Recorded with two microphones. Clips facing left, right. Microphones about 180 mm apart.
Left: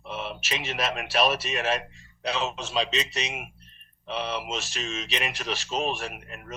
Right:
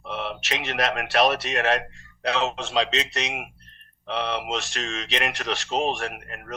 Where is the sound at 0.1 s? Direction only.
70° right (ahead or behind).